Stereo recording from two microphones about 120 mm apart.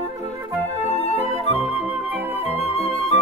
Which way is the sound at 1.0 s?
55° left (ahead or behind).